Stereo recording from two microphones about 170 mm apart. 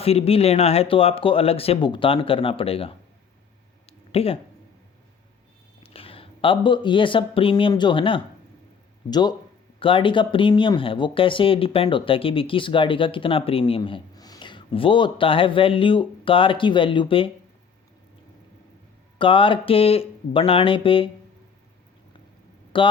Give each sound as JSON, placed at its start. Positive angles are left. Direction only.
{"t": 0.0, "sound": "speech", "side_deg": 35}
{"t": 4.1, "sound": "speech", "side_deg": 35}
{"t": 5.8, "sound": "speech", "side_deg": 35}
{"t": 19.2, "sound": "speech", "side_deg": 30}
{"t": 22.7, "sound": "speech", "side_deg": 30}